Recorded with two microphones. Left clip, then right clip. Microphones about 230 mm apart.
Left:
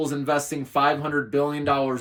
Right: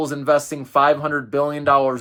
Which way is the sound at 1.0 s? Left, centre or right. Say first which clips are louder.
Right 3 dB; centre.